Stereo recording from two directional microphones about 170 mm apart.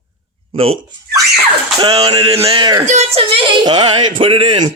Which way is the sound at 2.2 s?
35° right (ahead or behind).